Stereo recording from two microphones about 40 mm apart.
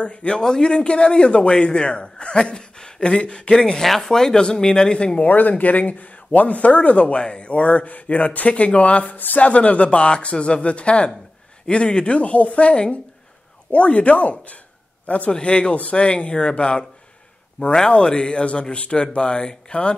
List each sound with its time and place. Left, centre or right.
0.0 s a man's voice: left
5.2 s a man's voice: left
15.3 s a man's voice: left
15.7 s speech: left
16.0 s a man's voice: left